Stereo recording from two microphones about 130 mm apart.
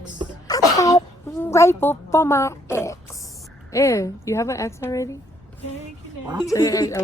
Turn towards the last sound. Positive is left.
turn(degrees=25)  # may be behind; listen again after turning